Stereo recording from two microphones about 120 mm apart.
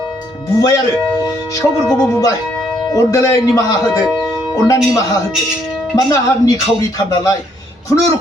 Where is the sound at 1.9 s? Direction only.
5° left (ahead or behind).